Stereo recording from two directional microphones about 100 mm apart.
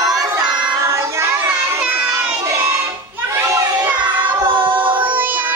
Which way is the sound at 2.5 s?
25° right (ahead or behind).